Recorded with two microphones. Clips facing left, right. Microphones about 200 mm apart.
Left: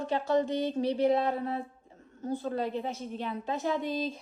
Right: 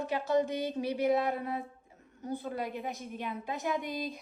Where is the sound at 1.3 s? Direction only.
15° right (ahead or behind).